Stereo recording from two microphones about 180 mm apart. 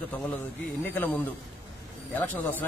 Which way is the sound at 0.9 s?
10° left (ahead or behind).